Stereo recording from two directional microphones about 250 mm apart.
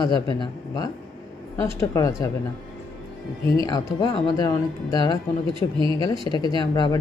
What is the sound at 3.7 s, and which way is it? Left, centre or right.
Speech, centre.